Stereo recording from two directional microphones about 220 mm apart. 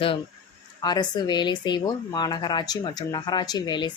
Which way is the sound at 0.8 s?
20° left (ahead or behind).